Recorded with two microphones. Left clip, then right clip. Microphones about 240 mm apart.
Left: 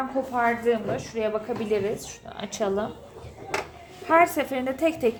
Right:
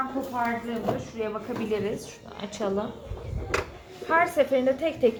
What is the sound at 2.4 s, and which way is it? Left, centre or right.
Speech, left.